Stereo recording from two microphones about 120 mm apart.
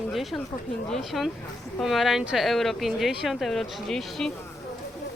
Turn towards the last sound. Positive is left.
turn(degrees=5)  # may be behind; listen again after turning